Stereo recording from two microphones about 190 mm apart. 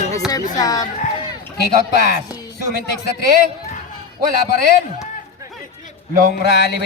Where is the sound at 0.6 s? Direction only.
20° left (ahead or behind).